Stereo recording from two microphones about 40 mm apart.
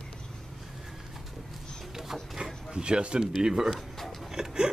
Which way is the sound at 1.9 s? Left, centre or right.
Centre.